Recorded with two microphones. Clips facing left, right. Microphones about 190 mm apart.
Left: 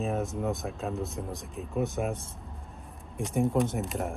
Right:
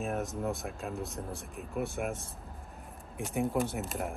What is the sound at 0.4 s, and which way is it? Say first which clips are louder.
Speech: left 3 dB; 20° left (ahead or behind).